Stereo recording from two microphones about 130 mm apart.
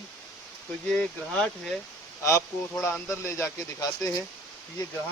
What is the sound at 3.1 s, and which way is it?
Speech, 20° left (ahead or behind).